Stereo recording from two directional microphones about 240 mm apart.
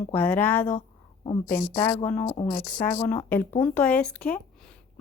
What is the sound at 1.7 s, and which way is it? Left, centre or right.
Speech, centre.